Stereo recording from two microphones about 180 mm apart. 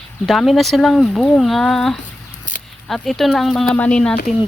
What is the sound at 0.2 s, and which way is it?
Speech, centre (ahead or behind).